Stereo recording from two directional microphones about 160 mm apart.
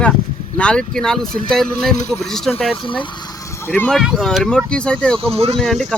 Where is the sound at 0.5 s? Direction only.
5° left (ahead or behind).